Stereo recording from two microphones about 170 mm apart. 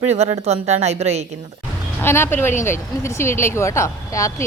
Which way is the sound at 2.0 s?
15° left (ahead or behind).